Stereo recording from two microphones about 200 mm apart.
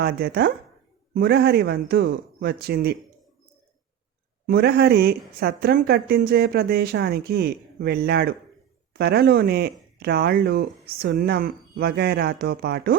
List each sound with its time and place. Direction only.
0.0 s a woman's voice: 50° right (ahead or behind)
4.4 s a woman's voice: 50° right (ahead or behind)